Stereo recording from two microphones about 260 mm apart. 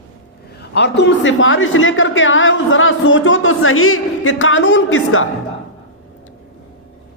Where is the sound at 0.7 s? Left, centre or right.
Left.